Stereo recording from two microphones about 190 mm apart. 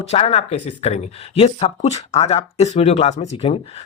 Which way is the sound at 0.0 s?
35° left (ahead or behind).